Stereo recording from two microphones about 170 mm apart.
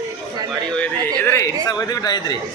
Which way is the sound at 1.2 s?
15° left (ahead or behind).